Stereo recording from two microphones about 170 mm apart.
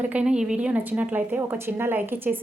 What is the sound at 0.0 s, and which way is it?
A woman's voice, 10° right (ahead or behind).